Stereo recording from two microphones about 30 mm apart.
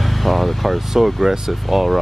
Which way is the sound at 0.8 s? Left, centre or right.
Centre.